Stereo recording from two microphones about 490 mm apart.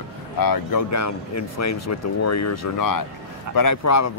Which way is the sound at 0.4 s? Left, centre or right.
Left.